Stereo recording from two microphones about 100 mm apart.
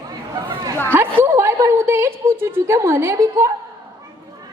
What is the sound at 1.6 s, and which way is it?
A woman's voice, 25° right (ahead or behind).